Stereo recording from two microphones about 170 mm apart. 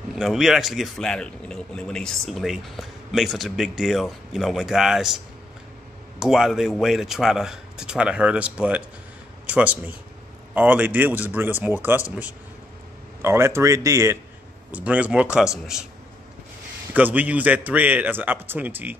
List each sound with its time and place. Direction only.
0.1 s a man's voice: centre (ahead or behind)
13.2 s a man's voice: 15° right (ahead or behind)
16.9 s a man's voice: 10° right (ahead or behind)